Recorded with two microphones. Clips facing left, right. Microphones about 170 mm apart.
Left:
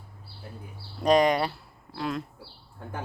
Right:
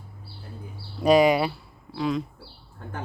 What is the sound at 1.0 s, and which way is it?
Speech, 5° right (ahead or behind).